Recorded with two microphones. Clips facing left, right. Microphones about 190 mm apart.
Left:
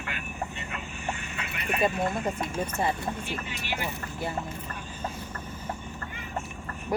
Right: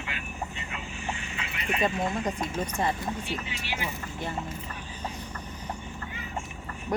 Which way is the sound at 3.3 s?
55° left (ahead or behind).